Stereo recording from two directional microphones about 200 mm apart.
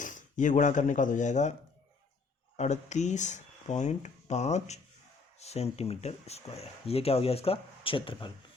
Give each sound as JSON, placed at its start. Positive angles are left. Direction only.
{"t": 0.0, "sound": "speech", "side_deg": 40}
{"t": 2.6, "sound": "speech", "side_deg": 35}